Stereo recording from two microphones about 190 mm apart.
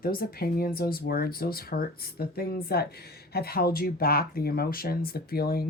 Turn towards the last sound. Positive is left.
turn(degrees=55)  # may be behind; listen again after turning